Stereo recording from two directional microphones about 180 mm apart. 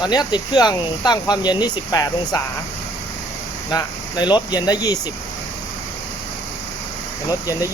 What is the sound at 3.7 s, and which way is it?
Speech, 25° left (ahead or behind).